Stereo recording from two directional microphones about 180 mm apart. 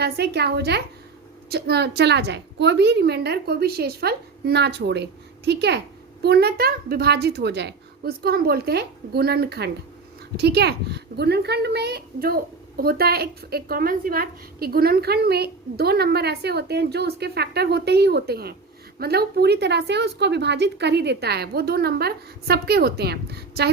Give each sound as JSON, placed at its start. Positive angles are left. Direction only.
{"t": 0.0, "sound": "a child's voice", "side_deg": -65}